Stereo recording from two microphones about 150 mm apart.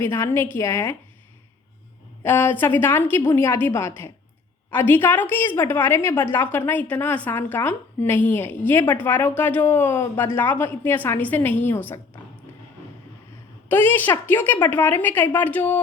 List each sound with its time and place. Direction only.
0.0 s a woman's voice: 15° left (ahead or behind)
2.2 s a woman's voice: 15° left (ahead or behind)
13.7 s a woman's voice: 15° left (ahead or behind)